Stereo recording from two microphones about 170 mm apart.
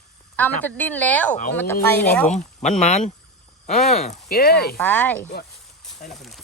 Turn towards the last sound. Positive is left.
turn(degrees=0)  # may be behind; listen again after turning